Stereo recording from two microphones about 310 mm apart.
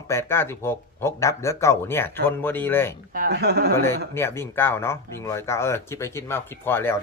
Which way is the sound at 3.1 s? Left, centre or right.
Right.